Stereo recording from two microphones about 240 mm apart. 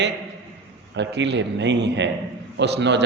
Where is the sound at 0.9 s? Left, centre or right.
Right.